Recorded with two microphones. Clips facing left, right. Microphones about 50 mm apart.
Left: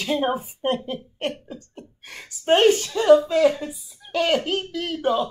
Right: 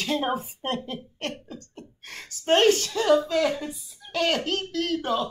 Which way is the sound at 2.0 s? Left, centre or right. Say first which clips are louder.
Right 2 dB; centre.